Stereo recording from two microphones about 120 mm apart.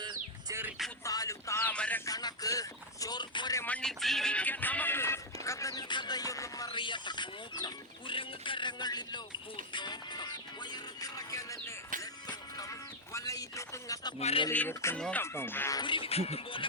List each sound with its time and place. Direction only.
1.0 s music: 30° left (ahead or behind)
1.7 s speech: 10° left (ahead or behind)
2.0 s speech: 30° left (ahead or behind)
3.7 s music: 5° left (ahead or behind); by 6.7 s 30° left (ahead or behind)
6.7 s speech: 45° left (ahead or behind); by 11.7 s 25° left (ahead or behind)
12.3 s music: 30° left (ahead or behind)
14.2 s speech: 60° left (ahead or behind)
14.5 s music: 15° left (ahead or behind)
14.9 s speech: 10° left (ahead or behind)
15.2 s music: 20° left (ahead or behind)
15.7 s speech: 40° left (ahead or behind)